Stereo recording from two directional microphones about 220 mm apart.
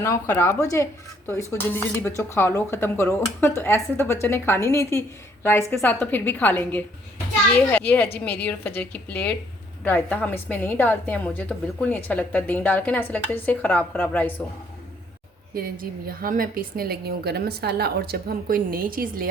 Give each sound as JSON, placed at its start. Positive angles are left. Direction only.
{"t": 0.0, "sound": "a woman's voice", "side_deg": 10}
{"t": 15.5, "sound": "a woman's voice", "side_deg": -40}